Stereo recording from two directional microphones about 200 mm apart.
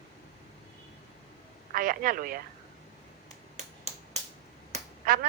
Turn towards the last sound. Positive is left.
turn(degrees=-45)  # may be behind; listen again after turning